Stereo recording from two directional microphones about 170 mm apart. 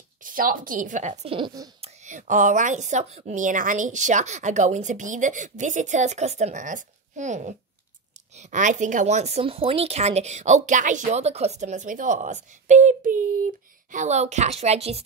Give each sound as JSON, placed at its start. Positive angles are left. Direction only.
{"t": 0.2, "sound": "a woman's voice", "side_deg": -55}
{"t": 1.8, "sound": "a woman's voice", "side_deg": -45}